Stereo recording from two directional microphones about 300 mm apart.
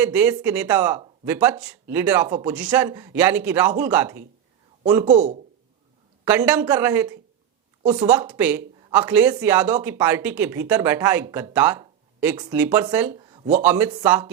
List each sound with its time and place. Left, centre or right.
0.0 s speech: centre
5.0 s speech: right
6.2 s speech: centre
13.6 s speech: centre